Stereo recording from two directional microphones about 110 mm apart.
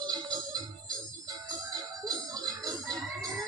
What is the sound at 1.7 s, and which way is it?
Music, 35° right (ahead or behind).